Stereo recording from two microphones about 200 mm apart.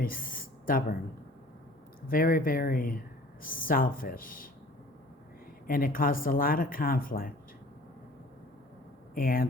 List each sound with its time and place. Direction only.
0.0 s a sound: 45° left (ahead or behind)
2.0 s speech: 45° left (ahead or behind)
5.6 s speech: 45° left (ahead or behind)
9.1 s speech: 45° left (ahead or behind)